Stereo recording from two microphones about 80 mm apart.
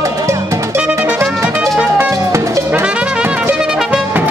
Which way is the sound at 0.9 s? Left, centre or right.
Right.